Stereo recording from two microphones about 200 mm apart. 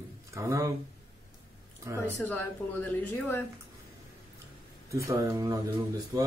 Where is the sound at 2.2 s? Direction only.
10° left (ahead or behind).